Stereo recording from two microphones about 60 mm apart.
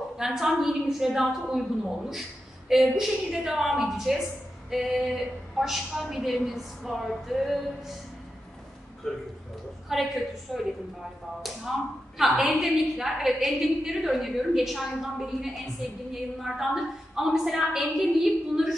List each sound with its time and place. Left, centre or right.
0.2 s a woman's voice: centre
2.7 s a woman's voice: centre
9.0 s a woman's voice: centre